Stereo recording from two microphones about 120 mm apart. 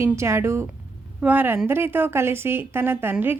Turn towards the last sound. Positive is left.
turn(degrees=-15)  # may be behind; listen again after turning